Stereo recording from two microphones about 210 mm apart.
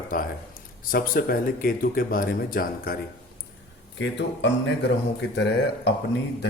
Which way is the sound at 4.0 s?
60° left (ahead or behind).